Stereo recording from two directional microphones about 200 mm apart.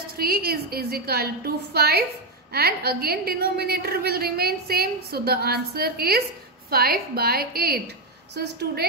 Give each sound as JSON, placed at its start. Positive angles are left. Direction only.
{"t": 0.2, "sound": "a woman's voice", "side_deg": -50}